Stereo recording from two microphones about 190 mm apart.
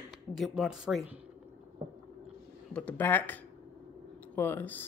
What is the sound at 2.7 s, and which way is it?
Speech, 10° left (ahead or behind).